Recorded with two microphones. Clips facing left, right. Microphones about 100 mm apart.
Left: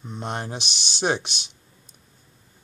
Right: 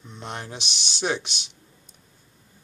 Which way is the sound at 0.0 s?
45° left (ahead or behind).